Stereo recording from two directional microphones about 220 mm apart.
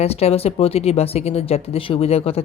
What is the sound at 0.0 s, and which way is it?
Speech, 30° left (ahead or behind).